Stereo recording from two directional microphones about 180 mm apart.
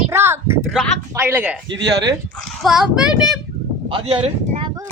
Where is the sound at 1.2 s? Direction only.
10° right (ahead or behind).